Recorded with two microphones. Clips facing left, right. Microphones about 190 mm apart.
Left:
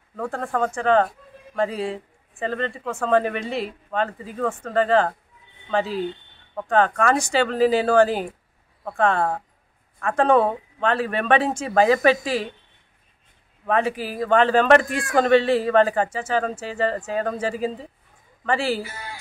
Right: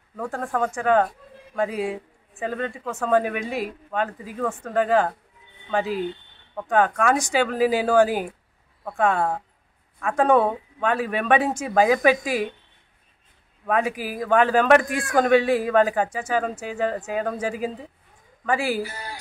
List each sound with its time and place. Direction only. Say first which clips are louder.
0.1 s a man's voice: left 1 dB; 5° right (ahead or behind)
7.2 s a man's voice: left 1 dB; 15° right (ahead or behind); by 12.3 s centre (ahead or behind)
13.7 s a man's voice: left 1 dB; 5° right (ahead or behind)
18.9 s speech: right 1 dB; 35° right (ahead or behind)